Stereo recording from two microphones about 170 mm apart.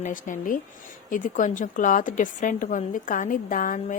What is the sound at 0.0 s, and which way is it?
A woman's voice, 50° left (ahead or behind).